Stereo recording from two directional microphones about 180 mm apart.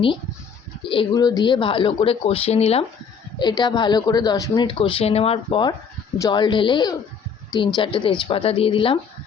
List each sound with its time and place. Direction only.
0.9 s a woman's voice: 25° left (ahead or behind)
3.3 s a woman's voice: 25° left (ahead or behind)